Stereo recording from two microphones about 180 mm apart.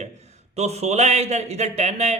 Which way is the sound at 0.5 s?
40° right (ahead or behind).